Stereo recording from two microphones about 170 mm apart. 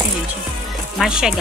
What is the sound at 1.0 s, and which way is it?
Speech, 5° right (ahead or behind).